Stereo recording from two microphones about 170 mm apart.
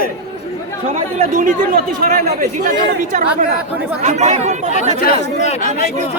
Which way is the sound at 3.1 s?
50° right (ahead or behind).